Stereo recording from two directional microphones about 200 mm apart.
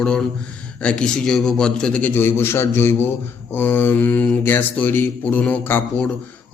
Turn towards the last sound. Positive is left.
turn(degrees=10)  # may be behind; listen again after turning